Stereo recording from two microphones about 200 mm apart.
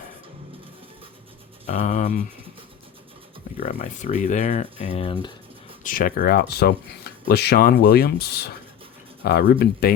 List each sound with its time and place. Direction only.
1.6 s speech: 40° left (ahead or behind)
3.6 s speech: 40° left (ahead or behind); by 5.3 s 25° left (ahead or behind)
5.8 s speech: 45° left (ahead or behind)